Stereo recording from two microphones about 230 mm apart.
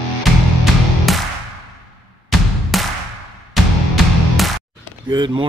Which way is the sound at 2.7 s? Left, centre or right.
Centre.